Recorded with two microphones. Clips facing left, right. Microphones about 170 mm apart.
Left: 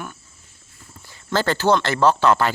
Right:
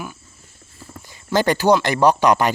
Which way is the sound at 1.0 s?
15° right (ahead or behind).